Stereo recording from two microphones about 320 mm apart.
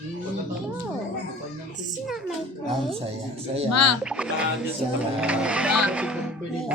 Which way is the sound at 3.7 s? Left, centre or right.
Left.